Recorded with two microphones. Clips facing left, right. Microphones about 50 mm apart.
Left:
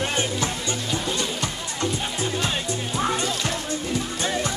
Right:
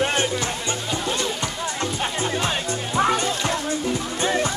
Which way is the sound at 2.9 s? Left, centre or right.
Right.